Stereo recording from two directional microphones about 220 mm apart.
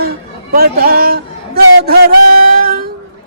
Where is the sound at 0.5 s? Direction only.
45° right (ahead or behind).